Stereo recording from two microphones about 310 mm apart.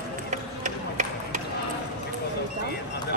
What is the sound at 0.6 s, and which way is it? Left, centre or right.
Run, right.